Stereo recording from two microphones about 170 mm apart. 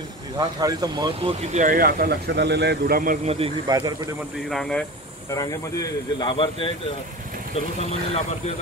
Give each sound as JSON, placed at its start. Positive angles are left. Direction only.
{"t": 0.4, "sound": "speech", "side_deg": -20}
{"t": 1.5, "sound": "speech", "side_deg": -50}
{"t": 3.3, "sound": "speech", "side_deg": -35}
{"t": 3.6, "sound": "speech", "side_deg": -25}
{"t": 4.5, "sound": "speech", "side_deg": 5}
{"t": 5.3, "sound": "speech", "side_deg": 20}